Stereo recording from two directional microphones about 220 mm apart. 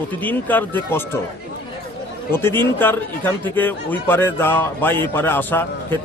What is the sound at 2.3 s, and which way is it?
Speech, 10° left (ahead or behind).